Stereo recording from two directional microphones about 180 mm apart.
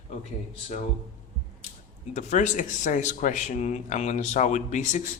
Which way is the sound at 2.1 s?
40° left (ahead or behind).